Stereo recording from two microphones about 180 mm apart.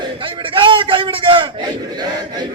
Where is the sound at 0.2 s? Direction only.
30° right (ahead or behind).